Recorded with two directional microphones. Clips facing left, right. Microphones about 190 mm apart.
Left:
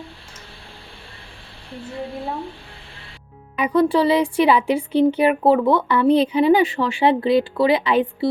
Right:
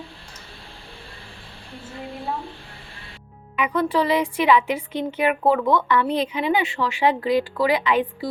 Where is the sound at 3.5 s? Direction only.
35° left (ahead or behind).